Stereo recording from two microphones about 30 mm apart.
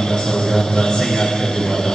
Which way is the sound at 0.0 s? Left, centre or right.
Centre.